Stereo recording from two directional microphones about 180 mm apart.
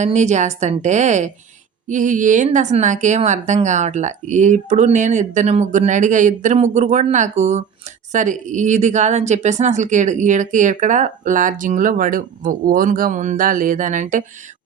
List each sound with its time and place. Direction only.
0.0 s a woman's voice: 40° right (ahead or behind)